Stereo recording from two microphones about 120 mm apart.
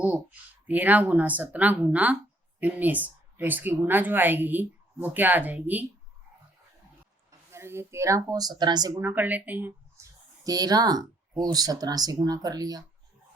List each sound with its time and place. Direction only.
0.7 s speech: 15° right (ahead or behind)
7.3 s speech: 20° right (ahead or behind)
9.0 s speech: 20° right (ahead or behind)
10.4 s speech: 30° right (ahead or behind)